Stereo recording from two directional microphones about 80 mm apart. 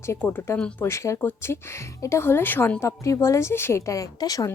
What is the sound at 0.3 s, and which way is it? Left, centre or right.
A woman's voice, left.